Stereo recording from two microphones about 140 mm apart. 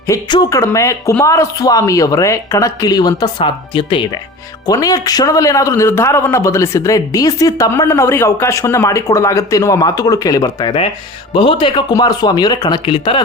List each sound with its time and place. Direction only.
0.1 s a man's voice: 25° left (ahead or behind)
11.3 s speech: 35° left (ahead or behind)